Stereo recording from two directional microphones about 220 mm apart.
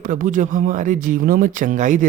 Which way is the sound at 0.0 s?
40° right (ahead or behind).